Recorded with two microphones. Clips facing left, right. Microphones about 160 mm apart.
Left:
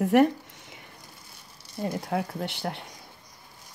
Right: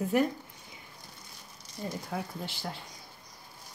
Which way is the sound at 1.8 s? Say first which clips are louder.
Left 7 dB; 65° left (ahead or behind).